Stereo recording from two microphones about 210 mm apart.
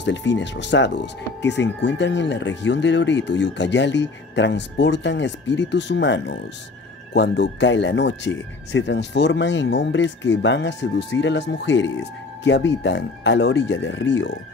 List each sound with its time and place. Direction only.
0.0 s speech: 60° left (ahead or behind)